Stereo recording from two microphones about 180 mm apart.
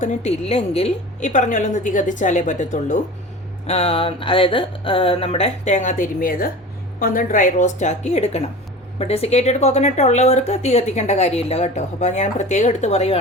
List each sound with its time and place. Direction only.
0.0 s a woman's voice: 40° left (ahead or behind)